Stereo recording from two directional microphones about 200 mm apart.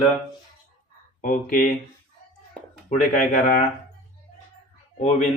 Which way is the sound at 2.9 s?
40° left (ahead or behind).